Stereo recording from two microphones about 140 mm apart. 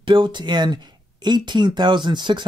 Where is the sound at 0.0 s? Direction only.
35° right (ahead or behind).